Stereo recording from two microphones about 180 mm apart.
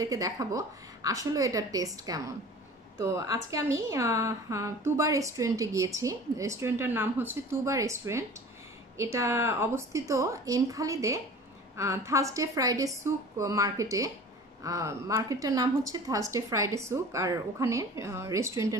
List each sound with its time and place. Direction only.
0.0 s a woman's voice: 20° right (ahead or behind)